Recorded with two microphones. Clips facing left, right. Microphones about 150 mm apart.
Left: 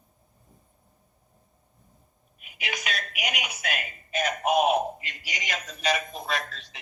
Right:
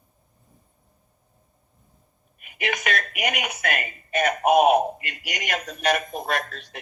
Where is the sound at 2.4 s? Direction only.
55° right (ahead or behind).